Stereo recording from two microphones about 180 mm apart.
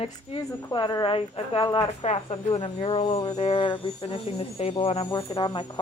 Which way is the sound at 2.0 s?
35° left (ahead or behind).